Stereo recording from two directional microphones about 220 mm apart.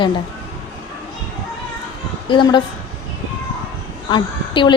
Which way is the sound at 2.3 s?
20° left (ahead or behind).